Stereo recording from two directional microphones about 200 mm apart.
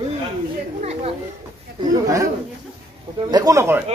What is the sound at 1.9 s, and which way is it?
Speech, 15° right (ahead or behind).